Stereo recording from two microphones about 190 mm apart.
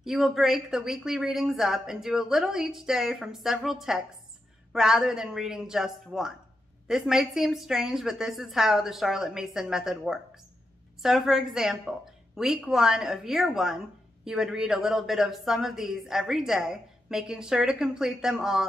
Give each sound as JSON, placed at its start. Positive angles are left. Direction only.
{"t": 0.0, "sound": "a woman's voice", "side_deg": 0}